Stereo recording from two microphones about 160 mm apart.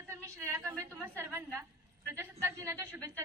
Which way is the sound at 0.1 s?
15° right (ahead or behind).